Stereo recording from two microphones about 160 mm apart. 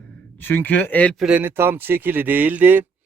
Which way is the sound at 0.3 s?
10° left (ahead or behind).